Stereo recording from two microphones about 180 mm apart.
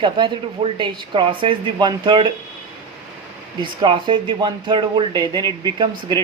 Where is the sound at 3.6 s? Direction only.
25° right (ahead or behind).